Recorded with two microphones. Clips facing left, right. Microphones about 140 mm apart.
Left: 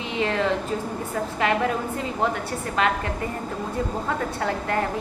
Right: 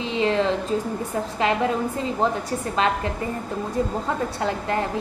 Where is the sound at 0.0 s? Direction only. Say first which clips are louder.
Right 3 dB; 25° right (ahead or behind).